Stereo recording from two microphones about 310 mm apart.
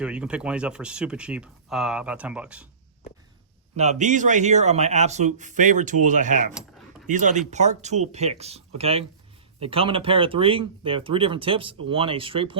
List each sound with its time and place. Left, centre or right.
0.0 s speech: centre
3.8 s a man's voice: right
6.5 s a sound: centre
7.1 s a man's voice: right